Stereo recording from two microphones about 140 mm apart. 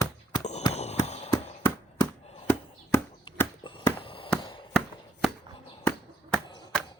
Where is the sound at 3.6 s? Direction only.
40° left (ahead or behind).